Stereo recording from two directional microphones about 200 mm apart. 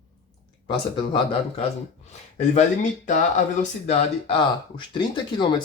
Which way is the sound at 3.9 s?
25° left (ahead or behind).